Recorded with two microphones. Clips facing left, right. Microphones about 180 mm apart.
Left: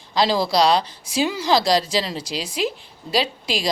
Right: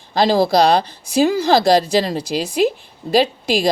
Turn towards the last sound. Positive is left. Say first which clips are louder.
# right 7 dB
turn(degrees=-50)  # may be behind; listen again after turning